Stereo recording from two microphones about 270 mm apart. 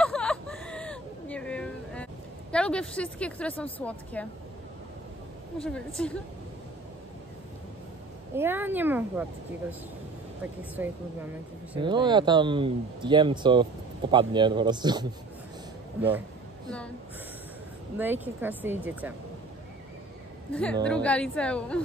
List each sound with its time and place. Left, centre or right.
0.0 s a sound: centre
2.5 s speech: centre
5.6 s speech: centre
8.4 s speech: centre
11.8 s speech: centre
17.9 s speech: centre
20.8 s speech: centre